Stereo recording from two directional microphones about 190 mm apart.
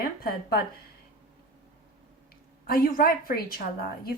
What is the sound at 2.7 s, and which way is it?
Speech, 50° left (ahead or behind).